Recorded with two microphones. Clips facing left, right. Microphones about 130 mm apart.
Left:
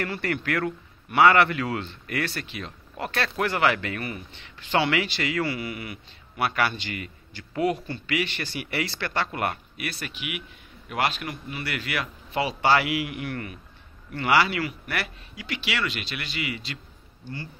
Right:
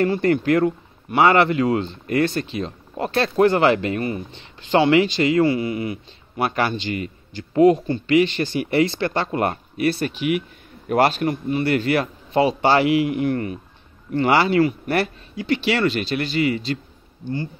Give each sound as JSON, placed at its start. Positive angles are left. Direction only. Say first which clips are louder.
{"t": 0.0, "sound": "a man's voice", "louder": "right 10 dB", "side_deg": -25}